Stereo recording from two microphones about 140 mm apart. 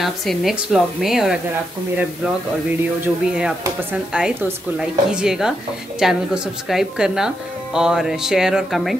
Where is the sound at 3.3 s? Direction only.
5° right (ahead or behind).